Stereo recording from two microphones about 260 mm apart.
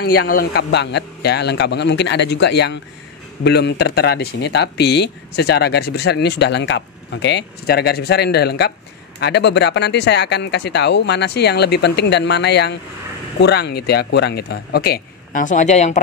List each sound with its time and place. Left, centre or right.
0.0 s speech: left